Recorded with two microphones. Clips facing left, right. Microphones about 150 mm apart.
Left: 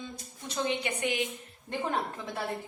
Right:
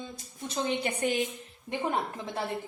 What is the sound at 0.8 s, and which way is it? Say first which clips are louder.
Speech: right 2 dB; 35° right (ahead or behind).